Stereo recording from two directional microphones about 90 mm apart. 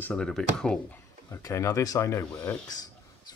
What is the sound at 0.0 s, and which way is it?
Speech, 10° left (ahead or behind).